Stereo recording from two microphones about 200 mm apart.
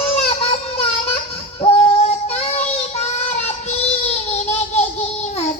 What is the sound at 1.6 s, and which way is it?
Child singing, 30° left (ahead or behind).